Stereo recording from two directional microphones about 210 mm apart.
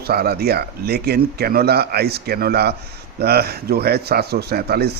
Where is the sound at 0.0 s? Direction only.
50° right (ahead or behind).